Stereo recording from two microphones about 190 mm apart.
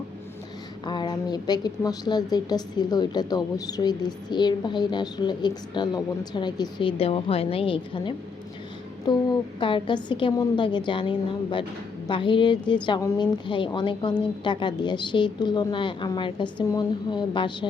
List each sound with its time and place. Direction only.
0.9 s a woman's voice: 20° left (ahead or behind)